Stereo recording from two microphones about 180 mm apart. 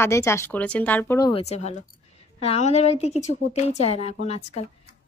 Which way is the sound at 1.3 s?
35° left (ahead or behind).